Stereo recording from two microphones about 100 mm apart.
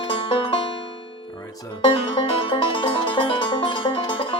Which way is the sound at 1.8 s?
55° left (ahead or behind).